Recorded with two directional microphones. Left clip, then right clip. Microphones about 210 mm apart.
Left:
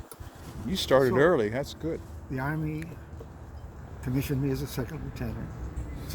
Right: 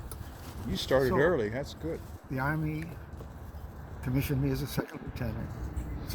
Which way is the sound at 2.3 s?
Centre (ahead or behind).